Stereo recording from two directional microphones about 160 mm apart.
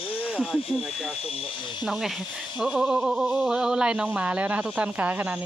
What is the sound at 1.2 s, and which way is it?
Speech, 35° left (ahead or behind).